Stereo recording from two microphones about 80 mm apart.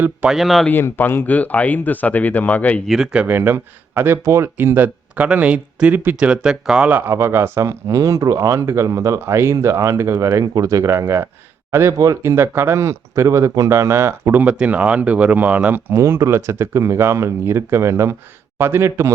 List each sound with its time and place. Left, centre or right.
0.3 s speech: centre
0.7 s speech: left
2.8 s speech: centre
3.1 s speech: centre
3.3 s speech: right
4.5 s speech: right
6.1 s speech: centre
7.1 s speech: right
11.9 s speech: right
14.6 s speech: centre
15.9 s speech: right